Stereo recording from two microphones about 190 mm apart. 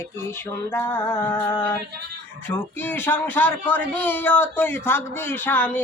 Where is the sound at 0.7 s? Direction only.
10° left (ahead or behind).